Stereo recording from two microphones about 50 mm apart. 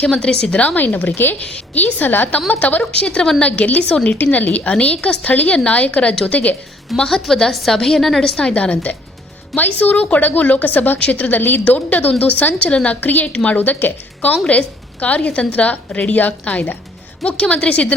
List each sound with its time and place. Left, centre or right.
0.0 s a woman's voice: centre
0.6 s a woman's voice: left
2.9 s a woman's voice: left
4.2 s a woman's voice: left
6.9 s a woman's voice: centre
8.4 s a woman's voice: centre
8.7 s a woman's voice: left
12.5 s a woman's voice: left
15.0 s a woman's voice: left